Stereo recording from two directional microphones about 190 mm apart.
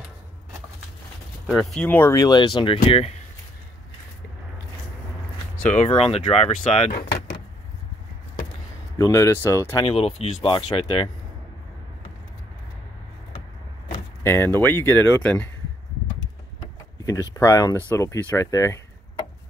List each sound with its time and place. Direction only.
1.5 s speech: centre (ahead or behind); by 3.2 s 30° left (ahead or behind)
5.6 s speech: 40° left (ahead or behind)
6.9 s speech: 55° left (ahead or behind)
8.9 s speech: 15° left (ahead or behind)
9.8 s speech: 30° left (ahead or behind)
14.2 s speech: 15° left (ahead or behind)
17.0 s speech: 15° left (ahead or behind)